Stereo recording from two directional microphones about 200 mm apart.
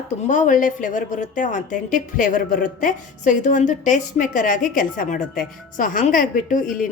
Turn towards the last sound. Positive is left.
turn(degrees=40)  # may be behind; listen again after turning